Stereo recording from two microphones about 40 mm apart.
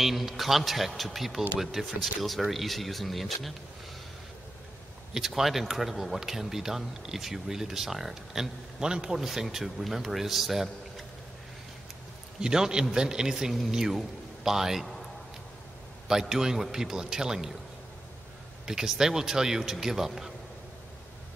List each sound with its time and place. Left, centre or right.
0.0 s a man's voice: centre
5.1 s speech: centre
8.7 s speech: right; by 10.7 s centre
12.4 s speech: centre
16.1 s speech: centre
18.7 s speech: centre